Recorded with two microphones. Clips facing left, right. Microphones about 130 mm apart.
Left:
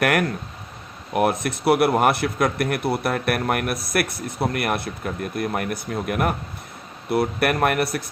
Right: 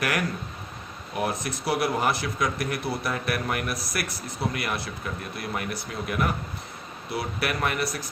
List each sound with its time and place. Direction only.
0.0 s speech: 60° left (ahead or behind)